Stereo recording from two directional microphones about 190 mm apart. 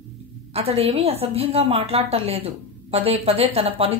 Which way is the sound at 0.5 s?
30° right (ahead or behind).